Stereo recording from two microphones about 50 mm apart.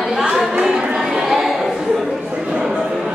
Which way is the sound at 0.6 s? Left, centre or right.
Centre.